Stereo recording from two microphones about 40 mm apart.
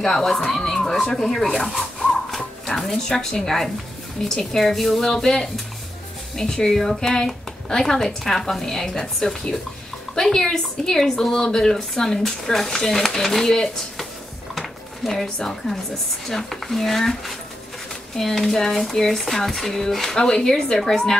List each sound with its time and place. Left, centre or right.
0.0 s a woman's voice: centre
2.0 s a sound: centre
4.2 s a woman's voice: centre
4.6 s a woman's voice: centre
6.7 s a woman's voice: centre
14.6 s a sound: centre
15.4 s a woman's voice: centre
18.1 s a woman's voice: centre